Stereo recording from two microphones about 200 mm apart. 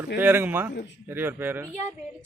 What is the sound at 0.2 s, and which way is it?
Speech, 10° right (ahead or behind).